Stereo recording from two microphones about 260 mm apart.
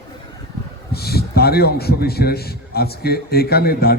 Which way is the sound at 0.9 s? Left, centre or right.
Left.